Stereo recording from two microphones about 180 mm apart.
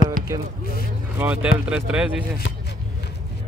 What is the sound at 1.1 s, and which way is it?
Speech, 10° right (ahead or behind).